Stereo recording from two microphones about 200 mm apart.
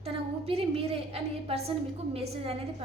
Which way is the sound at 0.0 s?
30° right (ahead or behind).